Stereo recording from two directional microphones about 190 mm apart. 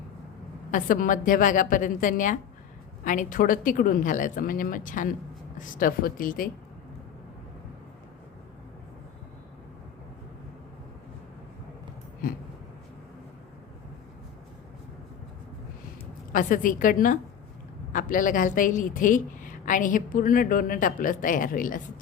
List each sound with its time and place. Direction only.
0.7 s a woman's voice: 45° left (ahead or behind)
16.3 s a woman's voice: 45° left (ahead or behind)